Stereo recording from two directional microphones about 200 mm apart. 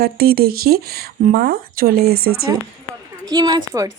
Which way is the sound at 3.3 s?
20° right (ahead or behind).